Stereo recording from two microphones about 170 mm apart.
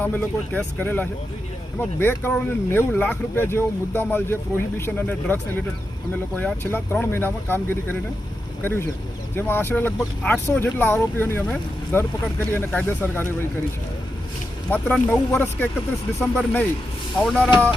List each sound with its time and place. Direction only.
0.0 s speech: 10° left (ahead or behind)
14.7 s speech: 5° left (ahead or behind)